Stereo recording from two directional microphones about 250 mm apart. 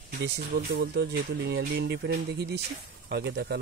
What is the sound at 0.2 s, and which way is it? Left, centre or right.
Speech, right.